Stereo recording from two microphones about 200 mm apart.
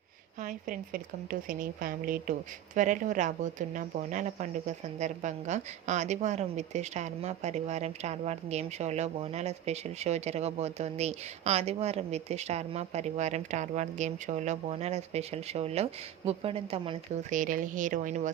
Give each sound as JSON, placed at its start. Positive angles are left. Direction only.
{"t": 0.4, "sound": "speech", "side_deg": -45}
{"t": 17.3, "sound": "speech", "side_deg": -40}